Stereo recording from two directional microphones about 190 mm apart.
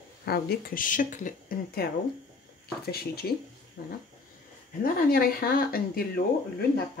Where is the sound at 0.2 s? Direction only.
55° left (ahead or behind).